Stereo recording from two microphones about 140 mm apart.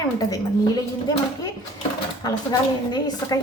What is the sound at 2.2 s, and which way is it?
A woman's voice, 25° left (ahead or behind).